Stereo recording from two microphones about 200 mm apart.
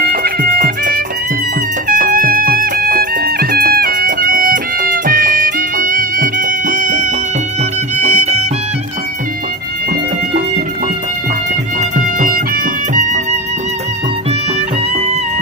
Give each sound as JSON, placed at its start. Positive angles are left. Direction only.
{"t": 0.0, "sound": "music", "side_deg": -50}
{"t": 11.9, "sound": "music", "side_deg": -45}